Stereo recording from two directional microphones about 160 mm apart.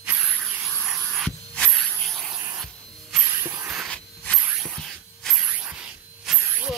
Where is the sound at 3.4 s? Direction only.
15° right (ahead or behind).